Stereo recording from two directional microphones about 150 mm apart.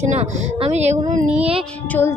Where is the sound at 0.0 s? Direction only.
50° right (ahead or behind).